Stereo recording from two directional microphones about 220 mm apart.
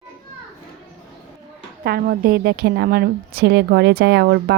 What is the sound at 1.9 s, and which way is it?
A woman's voice, 45° right (ahead or behind).